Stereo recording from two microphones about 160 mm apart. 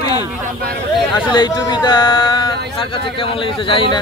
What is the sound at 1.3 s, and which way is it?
Speech, 25° left (ahead or behind).